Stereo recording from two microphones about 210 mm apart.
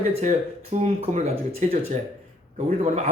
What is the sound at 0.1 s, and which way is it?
A man's voice, 30° right (ahead or behind).